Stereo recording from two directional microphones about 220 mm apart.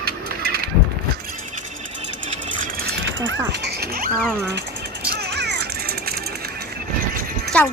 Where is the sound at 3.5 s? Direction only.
50° right (ahead or behind).